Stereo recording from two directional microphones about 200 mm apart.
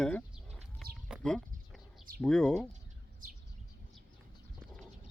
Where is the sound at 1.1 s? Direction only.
Centre (ahead or behind).